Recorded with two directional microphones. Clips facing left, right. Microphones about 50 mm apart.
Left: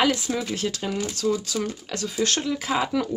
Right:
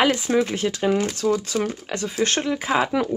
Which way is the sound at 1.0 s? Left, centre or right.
Right.